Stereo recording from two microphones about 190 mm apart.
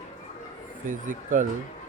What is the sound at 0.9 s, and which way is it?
Speech, 45° right (ahead or behind).